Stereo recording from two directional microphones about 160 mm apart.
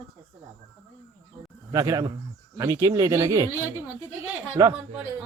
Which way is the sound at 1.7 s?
20° right (ahead or behind).